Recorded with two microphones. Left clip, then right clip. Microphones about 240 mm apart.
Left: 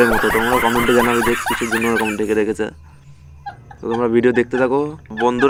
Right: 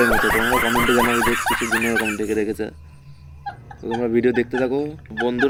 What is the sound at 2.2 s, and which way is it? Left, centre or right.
Speech, centre.